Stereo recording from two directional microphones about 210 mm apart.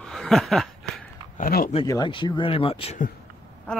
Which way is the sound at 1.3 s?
40° left (ahead or behind).